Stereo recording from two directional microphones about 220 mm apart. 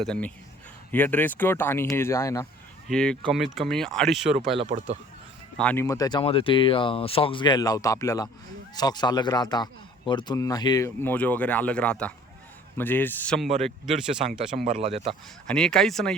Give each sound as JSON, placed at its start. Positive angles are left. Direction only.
{"t": 0.0, "sound": "speech", "side_deg": 5}
{"t": 2.8, "sound": "speech", "side_deg": 5}
{"t": 5.5, "sound": "speech", "side_deg": 10}
{"t": 14.5, "sound": "speech", "side_deg": -35}
{"t": 15.4, "sound": "speech", "side_deg": 5}